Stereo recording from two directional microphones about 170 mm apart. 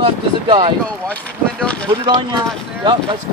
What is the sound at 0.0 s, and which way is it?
Speech, 30° right (ahead or behind).